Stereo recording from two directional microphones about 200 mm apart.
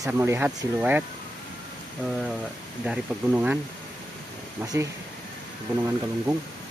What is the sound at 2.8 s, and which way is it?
Speech, 5° right (ahead or behind).